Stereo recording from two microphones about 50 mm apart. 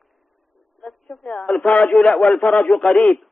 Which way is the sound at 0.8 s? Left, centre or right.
Centre.